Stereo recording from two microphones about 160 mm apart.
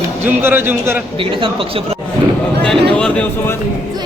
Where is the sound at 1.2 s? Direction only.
30° right (ahead or behind).